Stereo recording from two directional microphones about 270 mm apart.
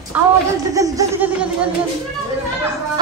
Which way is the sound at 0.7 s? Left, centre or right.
Centre.